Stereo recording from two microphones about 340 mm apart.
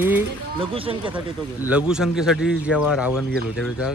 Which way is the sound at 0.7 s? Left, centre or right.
Centre.